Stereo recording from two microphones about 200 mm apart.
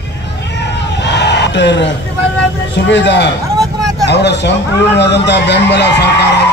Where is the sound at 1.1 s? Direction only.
55° left (ahead or behind).